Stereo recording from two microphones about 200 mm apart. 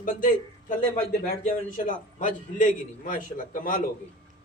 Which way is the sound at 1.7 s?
40° left (ahead or behind).